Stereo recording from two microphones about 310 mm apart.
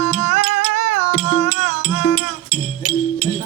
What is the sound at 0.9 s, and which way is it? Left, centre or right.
Music, left.